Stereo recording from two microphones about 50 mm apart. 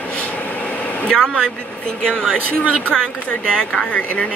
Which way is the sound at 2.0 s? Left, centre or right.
Centre.